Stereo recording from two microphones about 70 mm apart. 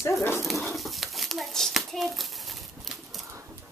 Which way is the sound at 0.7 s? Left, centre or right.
Centre.